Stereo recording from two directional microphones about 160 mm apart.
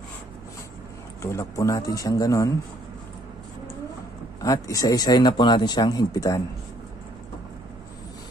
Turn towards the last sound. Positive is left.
turn(degrees=25)  # may be behind; listen again after turning